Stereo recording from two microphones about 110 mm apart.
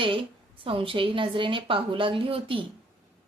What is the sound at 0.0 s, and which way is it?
A woman's voice, 50° right (ahead or behind).